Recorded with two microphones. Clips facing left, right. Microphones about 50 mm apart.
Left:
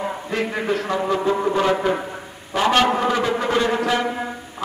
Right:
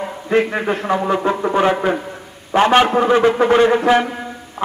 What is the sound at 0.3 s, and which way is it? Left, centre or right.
A man's voice, right.